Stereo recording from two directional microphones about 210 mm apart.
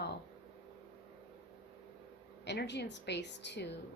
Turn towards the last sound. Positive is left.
turn(degrees=55)  # may be behind; listen again after turning